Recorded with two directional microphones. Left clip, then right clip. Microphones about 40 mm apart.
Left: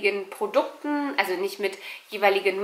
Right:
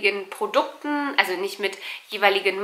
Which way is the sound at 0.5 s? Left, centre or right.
Centre.